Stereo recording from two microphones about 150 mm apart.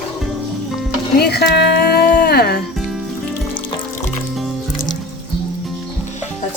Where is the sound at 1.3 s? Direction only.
90° left.